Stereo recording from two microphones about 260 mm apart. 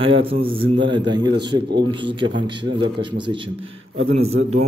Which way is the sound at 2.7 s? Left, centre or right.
Centre.